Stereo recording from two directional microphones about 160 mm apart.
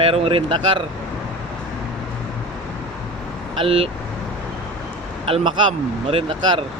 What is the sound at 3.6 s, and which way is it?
Speech, 35° right (ahead or behind).